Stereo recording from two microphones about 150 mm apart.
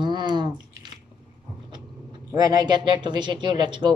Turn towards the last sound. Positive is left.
turn(degrees=-30)  # may be behind; listen again after turning